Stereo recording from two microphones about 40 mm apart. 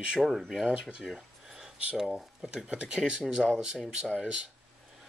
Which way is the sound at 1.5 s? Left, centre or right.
Centre.